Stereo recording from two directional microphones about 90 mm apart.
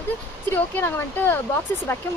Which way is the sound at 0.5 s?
20° left (ahead or behind).